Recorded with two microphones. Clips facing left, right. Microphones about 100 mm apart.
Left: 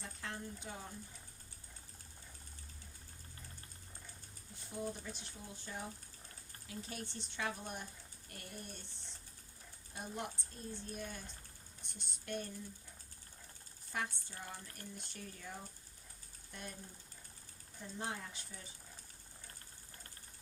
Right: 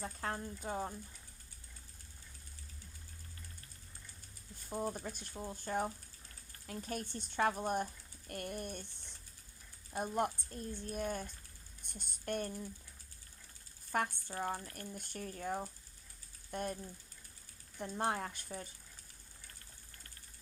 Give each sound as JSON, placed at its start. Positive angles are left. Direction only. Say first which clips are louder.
{"t": 0.0, "sound": "speech", "louder": "right 6 dB", "side_deg": -40}
{"t": 4.5, "sound": "speech", "louder": "right 4 dB", "side_deg": -45}
{"t": 13.9, "sound": "speech", "louder": "right 6 dB", "side_deg": -55}
{"t": 17.7, "sound": "speech", "louder": "right 8 dB", "side_deg": -60}